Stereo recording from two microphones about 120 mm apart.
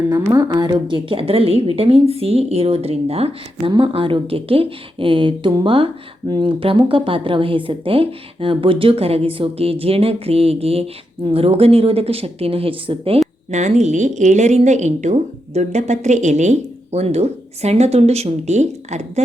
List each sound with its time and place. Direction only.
0.3 s speech: 35° right (ahead or behind); by 3.3 s 55° right (ahead or behind)
3.7 s speech: 45° right (ahead or behind)
13.5 s a woman's voice: 80° right